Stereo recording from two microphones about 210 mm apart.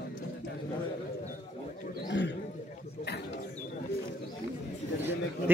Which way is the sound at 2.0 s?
60° left (ahead or behind).